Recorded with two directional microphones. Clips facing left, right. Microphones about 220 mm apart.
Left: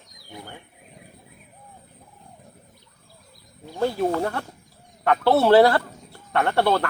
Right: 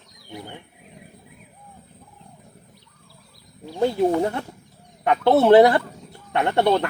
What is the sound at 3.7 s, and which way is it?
Speech, 20° right (ahead or behind).